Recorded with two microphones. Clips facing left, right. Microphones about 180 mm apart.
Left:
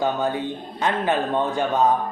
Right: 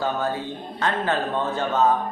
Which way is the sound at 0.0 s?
15° left (ahead or behind).